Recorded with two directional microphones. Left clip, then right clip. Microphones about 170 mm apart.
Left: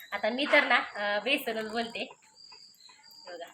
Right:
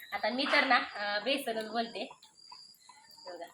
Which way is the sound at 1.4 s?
10° left (ahead or behind).